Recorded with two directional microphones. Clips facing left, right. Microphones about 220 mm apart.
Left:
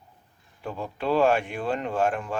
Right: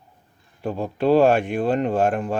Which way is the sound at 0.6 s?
40° right (ahead or behind).